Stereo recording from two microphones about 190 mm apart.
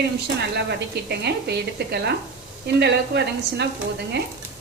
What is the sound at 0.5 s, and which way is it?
Speech, 60° right (ahead or behind).